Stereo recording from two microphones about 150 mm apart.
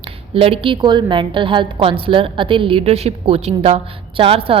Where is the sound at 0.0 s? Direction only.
40° right (ahead or behind).